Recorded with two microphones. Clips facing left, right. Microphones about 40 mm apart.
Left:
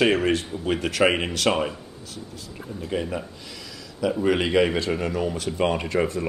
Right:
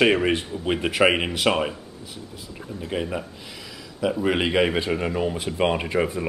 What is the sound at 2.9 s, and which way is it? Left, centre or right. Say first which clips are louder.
Speech: even; centre.